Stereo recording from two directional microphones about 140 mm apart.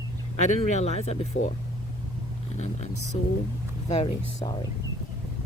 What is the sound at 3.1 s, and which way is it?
Speech, 50° left (ahead or behind).